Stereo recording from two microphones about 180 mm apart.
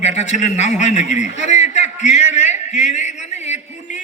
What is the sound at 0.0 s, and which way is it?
A man's voice, 40° left (ahead or behind).